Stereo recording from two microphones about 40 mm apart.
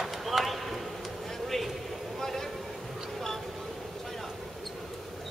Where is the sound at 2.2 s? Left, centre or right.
Centre.